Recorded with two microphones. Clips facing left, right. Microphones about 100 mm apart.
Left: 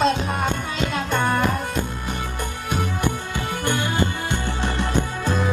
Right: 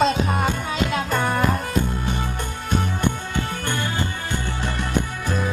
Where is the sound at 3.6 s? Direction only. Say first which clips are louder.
Left 3 dB; 15° left (ahead or behind).